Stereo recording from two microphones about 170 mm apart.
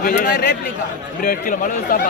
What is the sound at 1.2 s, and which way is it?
Speech, 55° left (ahead or behind).